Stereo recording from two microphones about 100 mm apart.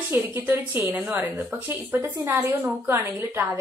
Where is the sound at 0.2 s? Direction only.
20° right (ahead or behind).